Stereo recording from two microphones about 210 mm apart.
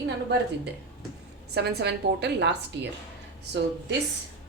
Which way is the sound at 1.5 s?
50° right (ahead or behind).